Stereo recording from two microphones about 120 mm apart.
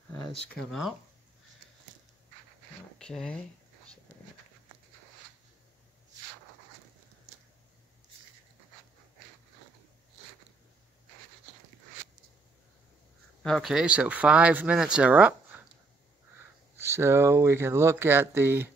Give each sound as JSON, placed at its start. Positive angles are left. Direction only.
{"t": 0.3, "sound": "speech", "side_deg": 0}
{"t": 3.0, "sound": "speech", "side_deg": 5}
{"t": 13.4, "sound": "speech", "side_deg": 0}
{"t": 16.8, "sound": "speech", "side_deg": -20}